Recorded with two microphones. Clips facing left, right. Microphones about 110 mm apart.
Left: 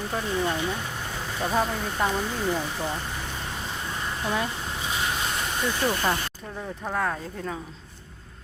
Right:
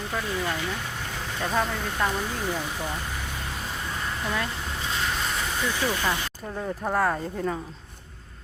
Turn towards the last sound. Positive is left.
turn(degrees=-5)  # may be behind; listen again after turning